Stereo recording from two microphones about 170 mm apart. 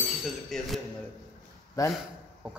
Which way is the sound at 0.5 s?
Centre (ahead or behind).